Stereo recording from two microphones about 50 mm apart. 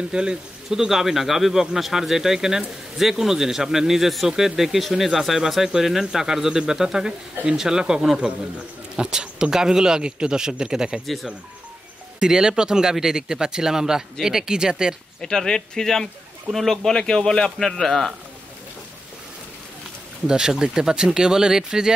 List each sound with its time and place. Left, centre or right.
0.1 s speech: centre
12.2 s speech: centre
15.2 s a man's voice: centre
20.2 s speech: centre